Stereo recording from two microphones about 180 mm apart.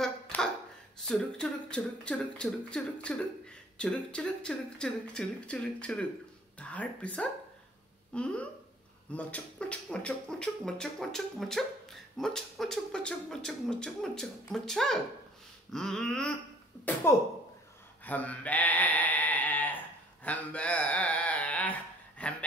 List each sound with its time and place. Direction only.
0.0 s finger snapping: 5° left (ahead or behind)
1.0 s speech: 5° left (ahead or behind)
17.1 s speech: 15° left (ahead or behind)
18.0 s sheep: 10° left (ahead or behind)
20.2 s speech: 10° left (ahead or behind)